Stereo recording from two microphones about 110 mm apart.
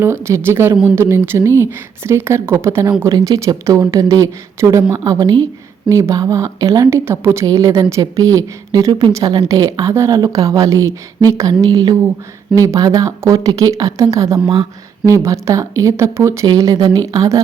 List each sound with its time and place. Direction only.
0.0 s a woman's voice: 25° right (ahead or behind); by 5.5 s 40° right (ahead or behind)
5.9 s a woman's voice: 30° right (ahead or behind)